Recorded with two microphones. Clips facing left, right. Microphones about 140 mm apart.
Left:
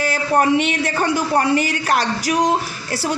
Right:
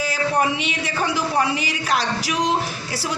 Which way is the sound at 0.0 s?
55° left (ahead or behind).